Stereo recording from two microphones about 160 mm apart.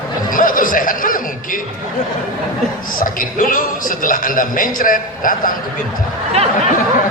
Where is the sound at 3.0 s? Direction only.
60° left (ahead or behind).